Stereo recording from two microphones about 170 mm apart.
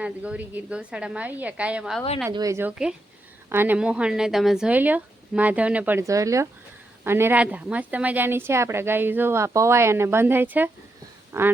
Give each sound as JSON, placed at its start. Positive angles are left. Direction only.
{"t": 0.0, "sound": "a woman's voice", "side_deg": -5}
{"t": 2.3, "sound": "a woman's voice", "side_deg": -20}